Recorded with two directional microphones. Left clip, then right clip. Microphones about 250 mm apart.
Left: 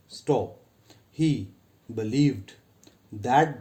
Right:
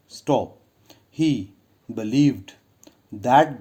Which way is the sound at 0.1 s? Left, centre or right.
Right.